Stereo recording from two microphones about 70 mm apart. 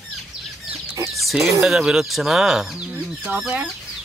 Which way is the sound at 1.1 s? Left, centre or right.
Centre.